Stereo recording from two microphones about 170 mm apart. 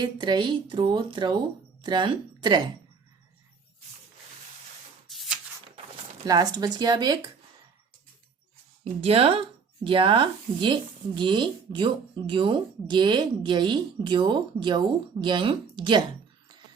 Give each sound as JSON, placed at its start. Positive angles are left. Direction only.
{"t": 0.0, "sound": "speech", "side_deg": -25}
{"t": 5.0, "sound": "shuffling cards", "side_deg": 0}
{"t": 6.2, "sound": "speech", "side_deg": -20}
{"t": 8.8, "sound": "speech", "side_deg": -35}